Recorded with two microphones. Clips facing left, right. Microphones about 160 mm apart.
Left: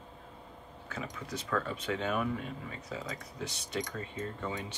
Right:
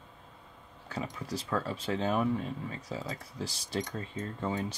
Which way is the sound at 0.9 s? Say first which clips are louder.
Right 3 dB; 35° right (ahead or behind).